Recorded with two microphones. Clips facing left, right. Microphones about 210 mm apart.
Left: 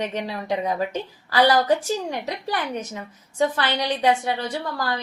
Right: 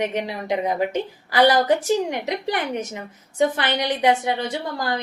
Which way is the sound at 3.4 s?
15° right (ahead or behind).